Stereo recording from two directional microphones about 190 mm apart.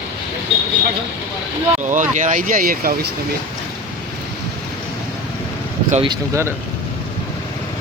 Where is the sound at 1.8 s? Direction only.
40° right (ahead or behind).